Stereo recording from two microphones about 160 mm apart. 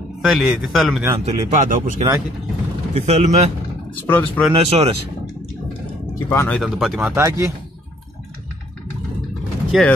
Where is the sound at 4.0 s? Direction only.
10° left (ahead or behind).